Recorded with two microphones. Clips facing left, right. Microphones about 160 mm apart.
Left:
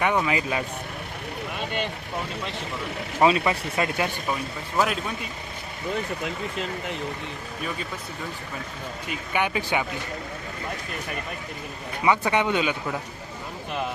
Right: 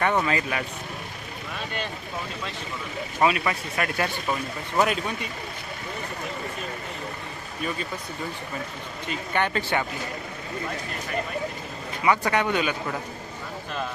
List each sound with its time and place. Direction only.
0.0 s speech: 10° left (ahead or behind)
3.2 s speech: 25° left (ahead or behind)
4.8 s speech: centre (ahead or behind)
9.0 s speech: 10° left (ahead or behind)
12.0 s speech: 15° left (ahead or behind)